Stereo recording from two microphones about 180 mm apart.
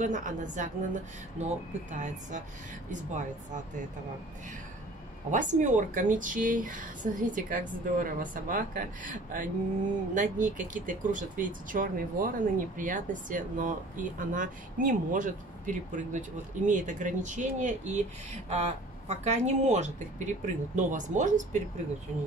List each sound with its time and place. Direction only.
0.0 s speech: 45° right (ahead or behind)
5.3 s speech: 45° right (ahead or behind)